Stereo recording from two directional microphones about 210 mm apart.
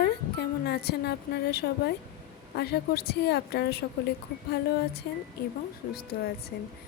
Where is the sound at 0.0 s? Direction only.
50° left (ahead or behind).